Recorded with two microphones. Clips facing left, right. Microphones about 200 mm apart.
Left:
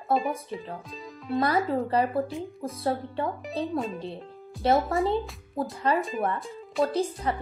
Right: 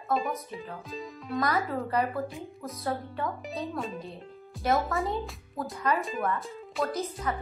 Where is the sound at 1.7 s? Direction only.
30° left (ahead or behind).